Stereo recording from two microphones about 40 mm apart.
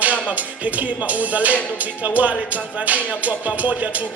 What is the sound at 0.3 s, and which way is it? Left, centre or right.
Music, right.